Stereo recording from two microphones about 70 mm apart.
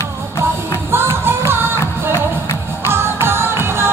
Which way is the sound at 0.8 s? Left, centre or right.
Right.